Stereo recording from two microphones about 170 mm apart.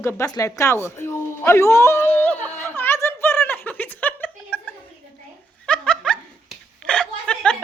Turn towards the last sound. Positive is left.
turn(degrees=5)  # may be behind; listen again after turning